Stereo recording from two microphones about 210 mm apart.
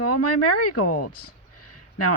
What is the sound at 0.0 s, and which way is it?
Speech, 90° left.